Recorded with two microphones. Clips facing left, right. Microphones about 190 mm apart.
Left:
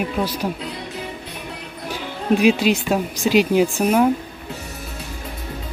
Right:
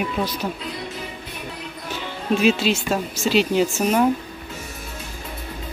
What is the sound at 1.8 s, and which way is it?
Music, 15° left (ahead or behind).